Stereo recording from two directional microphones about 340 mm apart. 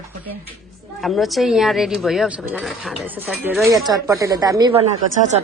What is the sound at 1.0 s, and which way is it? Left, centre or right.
A woman's voice, centre.